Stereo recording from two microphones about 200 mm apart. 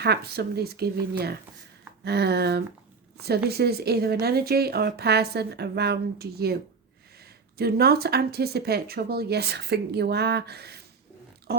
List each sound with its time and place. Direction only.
0.0 s speech: 55° right (ahead or behind)
2.0 s a sound: 55° right (ahead or behind)
3.2 s speech: 55° right (ahead or behind)
7.6 s speech: 50° right (ahead or behind)